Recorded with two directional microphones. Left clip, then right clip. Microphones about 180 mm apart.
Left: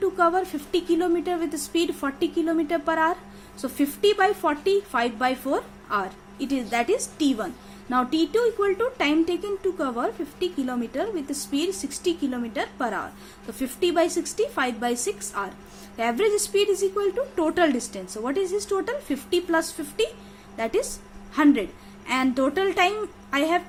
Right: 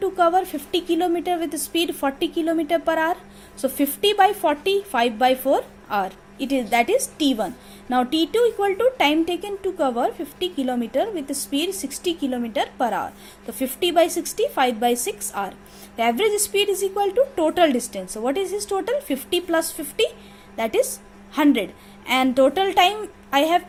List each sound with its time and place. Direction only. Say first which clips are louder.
0.0 s speech: right 3 dB; 15° right (ahead or behind)